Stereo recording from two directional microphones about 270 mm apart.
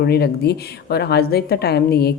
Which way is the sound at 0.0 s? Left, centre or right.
Left.